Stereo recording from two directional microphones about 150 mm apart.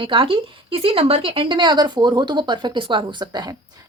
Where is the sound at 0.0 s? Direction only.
35° right (ahead or behind).